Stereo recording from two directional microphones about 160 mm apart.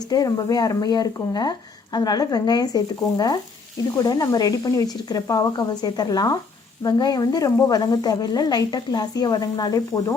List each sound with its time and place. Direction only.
0.1 s speech: 25° left (ahead or behind)